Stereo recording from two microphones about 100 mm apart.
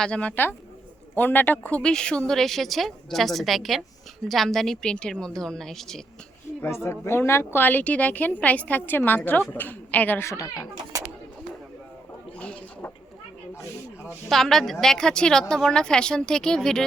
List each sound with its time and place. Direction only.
0.0 s a woman's voice: 10° left (ahead or behind)
6.7 s a woman's voice: 25° left (ahead or behind)
10.9 s a sound: 35° right (ahead or behind)
14.3 s a woman's voice: 5° left (ahead or behind)